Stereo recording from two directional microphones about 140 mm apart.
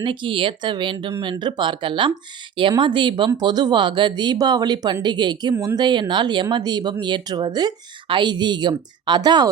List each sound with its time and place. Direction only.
0.0 s speech: 35° right (ahead or behind)